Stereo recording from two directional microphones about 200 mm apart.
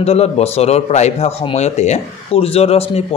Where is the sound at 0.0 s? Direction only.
30° left (ahead or behind).